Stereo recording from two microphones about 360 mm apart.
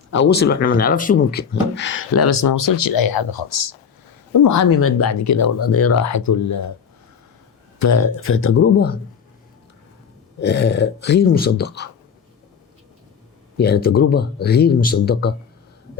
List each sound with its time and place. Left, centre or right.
0.1 s speech: left
4.3 s speech: left
7.8 s speech: left
10.4 s speech: left
13.6 s speech: left